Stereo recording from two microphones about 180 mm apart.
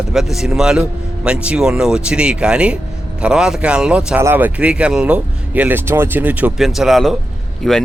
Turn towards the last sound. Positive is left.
turn(degrees=0)  # may be behind; listen again after turning